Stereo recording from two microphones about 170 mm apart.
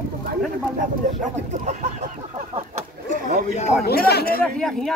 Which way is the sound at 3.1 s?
50° right (ahead or behind).